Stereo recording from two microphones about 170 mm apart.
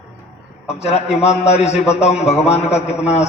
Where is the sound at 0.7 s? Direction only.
40° left (ahead or behind).